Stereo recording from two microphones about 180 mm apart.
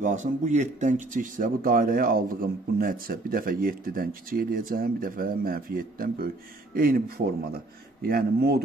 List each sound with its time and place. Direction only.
0.0 s speech: 45° right (ahead or behind); by 8.6 s 60° right (ahead or behind)